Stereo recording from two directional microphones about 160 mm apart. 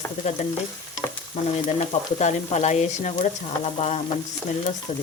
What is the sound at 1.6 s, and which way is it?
Frying, 50° left (ahead or behind).